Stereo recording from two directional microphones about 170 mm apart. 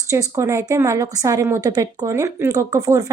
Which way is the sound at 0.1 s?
20° right (ahead or behind).